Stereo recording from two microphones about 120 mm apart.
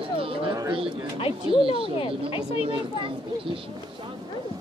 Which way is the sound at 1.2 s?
45° left (ahead or behind).